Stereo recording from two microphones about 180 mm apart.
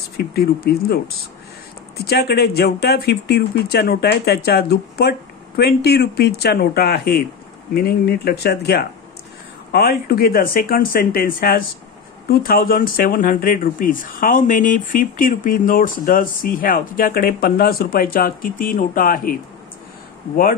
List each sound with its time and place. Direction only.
0.3 s speech: 60° left (ahead or behind)
2.0 s speech: 60° left (ahead or behind)